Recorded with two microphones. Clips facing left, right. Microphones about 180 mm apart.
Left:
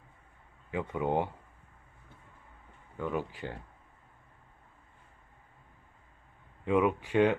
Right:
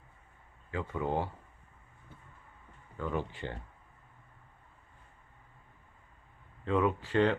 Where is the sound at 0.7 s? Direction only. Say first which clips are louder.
Left 3 dB; 20° left (ahead or behind).